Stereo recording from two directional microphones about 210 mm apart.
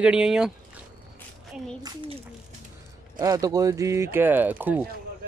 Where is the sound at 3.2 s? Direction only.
15° right (ahead or behind).